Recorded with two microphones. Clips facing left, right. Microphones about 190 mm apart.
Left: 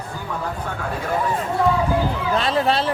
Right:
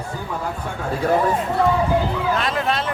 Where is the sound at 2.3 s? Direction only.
30° left (ahead or behind).